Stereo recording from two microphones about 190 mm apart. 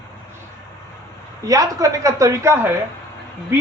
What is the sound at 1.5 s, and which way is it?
A woman's voice, 15° right (ahead or behind).